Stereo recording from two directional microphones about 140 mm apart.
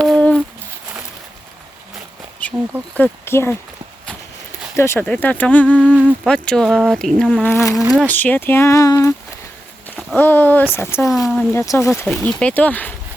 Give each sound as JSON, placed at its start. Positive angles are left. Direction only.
{"t": 0.0, "sound": "a sound", "side_deg": 5}
{"t": 2.4, "sound": "a sound", "side_deg": 10}
{"t": 2.9, "sound": "speech", "side_deg": 15}
{"t": 4.8, "sound": "speech", "side_deg": 15}
{"t": 5.8, "sound": "a sound", "side_deg": -10}
{"t": 6.2, "sound": "speech", "side_deg": 5}
{"t": 7.4, "sound": "speech", "side_deg": 20}
{"t": 10.2, "sound": "speech", "side_deg": 15}
{"t": 11.0, "sound": "speech", "side_deg": 0}
{"t": 11.5, "sound": "speech", "side_deg": 20}
{"t": 12.0, "sound": "speech", "side_deg": 10}